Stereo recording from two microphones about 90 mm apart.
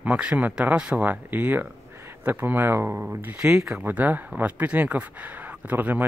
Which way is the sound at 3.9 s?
15° right (ahead or behind).